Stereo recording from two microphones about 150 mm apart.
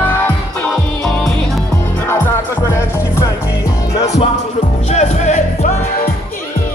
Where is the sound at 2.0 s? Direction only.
15° left (ahead or behind).